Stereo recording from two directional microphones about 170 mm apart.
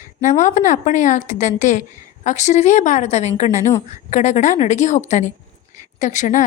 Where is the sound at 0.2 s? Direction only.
45° left (ahead or behind).